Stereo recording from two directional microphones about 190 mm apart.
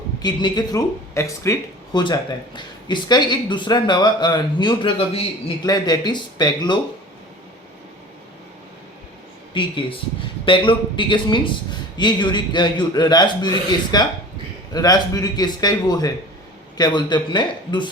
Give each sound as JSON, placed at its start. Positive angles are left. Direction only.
{"t": 0.2, "sound": "a man's voice", "side_deg": 20}
{"t": 9.5, "sound": "a man's voice", "side_deg": 25}